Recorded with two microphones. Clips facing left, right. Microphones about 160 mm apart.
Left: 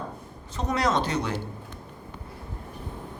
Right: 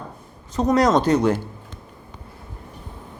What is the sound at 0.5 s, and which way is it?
Speech, 40° right (ahead or behind).